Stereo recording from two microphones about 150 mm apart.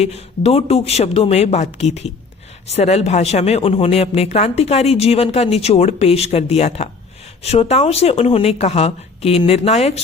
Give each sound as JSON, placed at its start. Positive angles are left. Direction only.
{"t": 0.0, "sound": "speech", "side_deg": 45}